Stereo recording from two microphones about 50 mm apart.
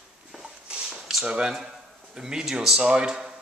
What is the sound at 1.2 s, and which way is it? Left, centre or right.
Speech, right.